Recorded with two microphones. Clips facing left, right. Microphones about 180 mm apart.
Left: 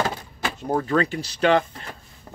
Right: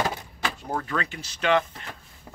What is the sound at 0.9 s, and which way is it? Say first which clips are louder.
Speech: left 9 dB; 35° left (ahead or behind).